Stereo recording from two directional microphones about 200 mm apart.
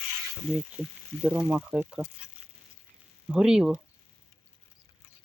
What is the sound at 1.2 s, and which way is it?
Speech, 5° right (ahead or behind).